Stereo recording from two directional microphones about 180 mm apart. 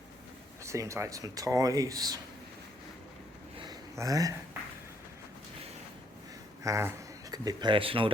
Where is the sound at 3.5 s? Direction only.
25° right (ahead or behind).